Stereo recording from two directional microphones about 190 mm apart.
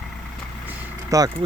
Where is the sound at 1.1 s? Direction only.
15° right (ahead or behind).